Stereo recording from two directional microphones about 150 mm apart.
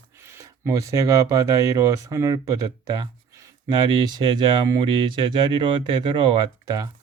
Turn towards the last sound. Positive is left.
turn(degrees=-25)  # may be behind; listen again after turning